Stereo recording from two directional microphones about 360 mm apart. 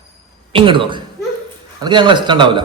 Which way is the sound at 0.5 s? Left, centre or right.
Centre.